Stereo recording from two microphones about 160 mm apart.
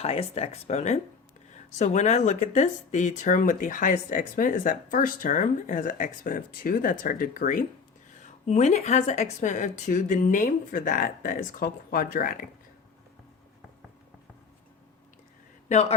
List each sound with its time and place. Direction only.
0.0 s speech: 40° left (ahead or behind); by 12.5 s 60° left (ahead or behind)
15.7 s speech: 45° left (ahead or behind)